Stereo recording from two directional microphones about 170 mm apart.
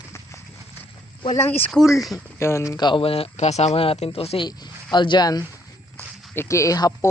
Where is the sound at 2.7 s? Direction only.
25° left (ahead or behind).